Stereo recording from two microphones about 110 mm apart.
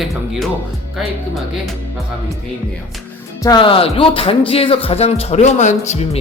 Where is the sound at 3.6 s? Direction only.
55° left (ahead or behind); by 6.1 s 85° left.